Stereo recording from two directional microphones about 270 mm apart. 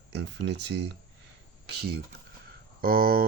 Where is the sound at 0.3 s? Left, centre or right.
Right.